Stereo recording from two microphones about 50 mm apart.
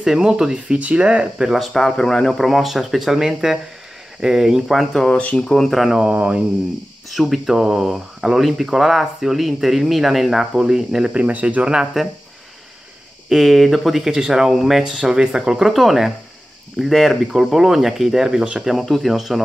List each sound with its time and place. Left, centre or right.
0.0 s speech: centre
0.7 s speech: right
1.4 s speech: centre
2.3 s speech: centre
5.1 s speech: left
5.5 s speech: centre
5.9 s speech: right
7.1 s speech: centre
11.1 s speech: right
13.3 s speech: centre